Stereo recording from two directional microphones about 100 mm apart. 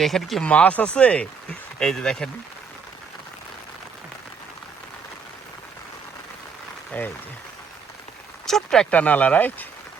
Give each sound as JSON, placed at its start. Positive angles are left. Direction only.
{"t": 0.0, "sound": "speech", "side_deg": 0}
{"t": 0.4, "sound": "speech", "side_deg": 15}
{"t": 6.9, "sound": "speech", "side_deg": 15}
{"t": 8.4, "sound": "a sound", "side_deg": 5}
{"t": 8.9, "sound": "speech", "side_deg": 15}